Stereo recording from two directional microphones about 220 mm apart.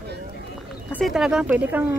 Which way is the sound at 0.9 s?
Centre (ahead or behind).